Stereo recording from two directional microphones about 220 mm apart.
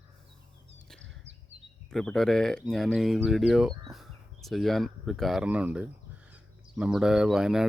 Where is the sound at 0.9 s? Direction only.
55° right (ahead or behind).